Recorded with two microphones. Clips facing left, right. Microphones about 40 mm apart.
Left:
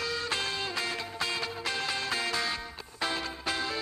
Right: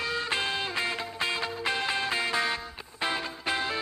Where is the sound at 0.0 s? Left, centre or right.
Right.